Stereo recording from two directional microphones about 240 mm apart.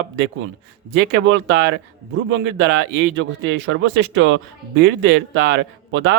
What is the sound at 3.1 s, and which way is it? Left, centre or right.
Speech, right.